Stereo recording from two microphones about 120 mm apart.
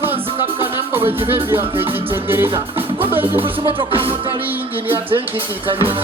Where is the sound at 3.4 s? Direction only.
45° right (ahead or behind).